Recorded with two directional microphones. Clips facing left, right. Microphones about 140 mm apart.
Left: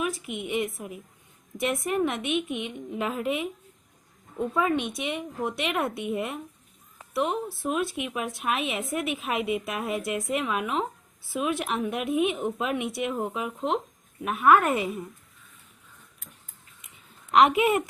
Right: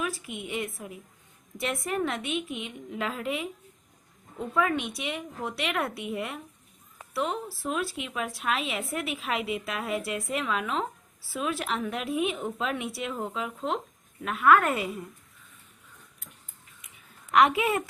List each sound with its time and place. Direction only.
0.0 s speech: 20° left (ahead or behind)
17.3 s speech: 20° left (ahead or behind)